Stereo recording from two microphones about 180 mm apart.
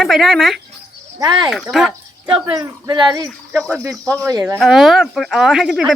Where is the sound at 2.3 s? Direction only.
25° right (ahead or behind).